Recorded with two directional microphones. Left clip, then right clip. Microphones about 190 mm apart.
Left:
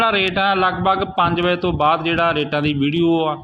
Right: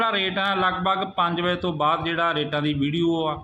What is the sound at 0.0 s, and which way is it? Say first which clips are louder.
A man's voice: left 6 dB; 25° left (ahead or behind).